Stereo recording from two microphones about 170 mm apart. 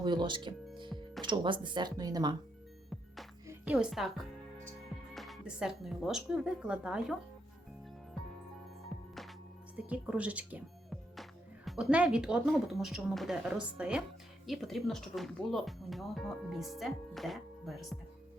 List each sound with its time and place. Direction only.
0.0 s speech: 25° right (ahead or behind)
3.6 s speech: 5° right (ahead or behind)
8.9 s music: centre (ahead or behind)
9.7 s speech: 10° right (ahead or behind)